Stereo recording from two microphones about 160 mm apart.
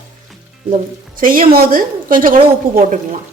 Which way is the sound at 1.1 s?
60° right (ahead or behind).